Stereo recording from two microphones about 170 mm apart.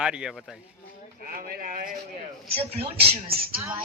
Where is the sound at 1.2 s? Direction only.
55° right (ahead or behind).